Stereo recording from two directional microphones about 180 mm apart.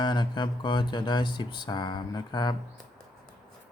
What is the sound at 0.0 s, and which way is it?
Speech, 25° left (ahead or behind).